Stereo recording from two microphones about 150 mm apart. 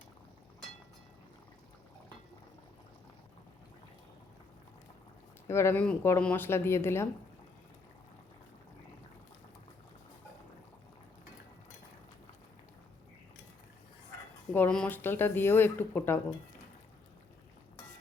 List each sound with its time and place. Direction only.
5.5 s speech: 15° left (ahead or behind)
14.5 s speech: 10° left (ahead or behind)